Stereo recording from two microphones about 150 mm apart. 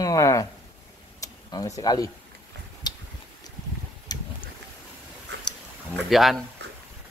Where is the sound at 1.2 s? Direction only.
25° left (ahead or behind).